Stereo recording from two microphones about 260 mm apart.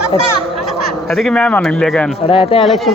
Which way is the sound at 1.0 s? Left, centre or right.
Centre.